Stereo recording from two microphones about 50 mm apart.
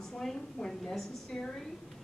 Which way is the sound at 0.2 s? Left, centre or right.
Centre.